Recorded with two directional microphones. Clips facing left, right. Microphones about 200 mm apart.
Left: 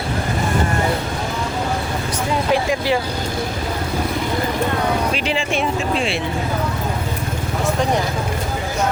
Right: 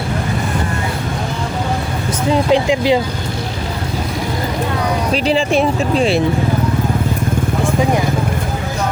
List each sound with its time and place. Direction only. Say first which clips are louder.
2.5 s speech: right 4 dB; 20° right (ahead or behind)
5.1 s speech: right 7 dB; 35° right (ahead or behind)